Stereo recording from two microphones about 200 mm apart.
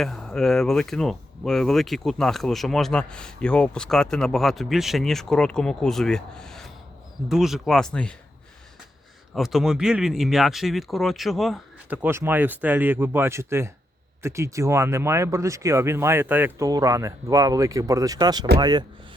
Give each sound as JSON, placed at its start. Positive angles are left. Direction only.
{"t": 0.0, "sound": "speech", "side_deg": 0}
{"t": 9.3, "sound": "speech", "side_deg": 0}